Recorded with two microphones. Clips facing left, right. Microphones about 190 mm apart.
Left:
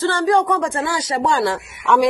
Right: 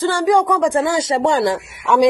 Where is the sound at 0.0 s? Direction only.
15° right (ahead or behind).